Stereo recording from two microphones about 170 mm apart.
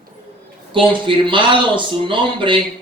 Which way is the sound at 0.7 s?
30° right (ahead or behind).